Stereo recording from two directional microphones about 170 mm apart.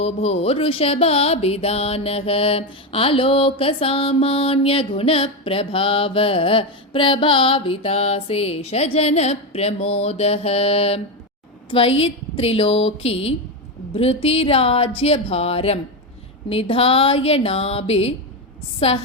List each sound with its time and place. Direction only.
0.0 s music: 35° left (ahead or behind)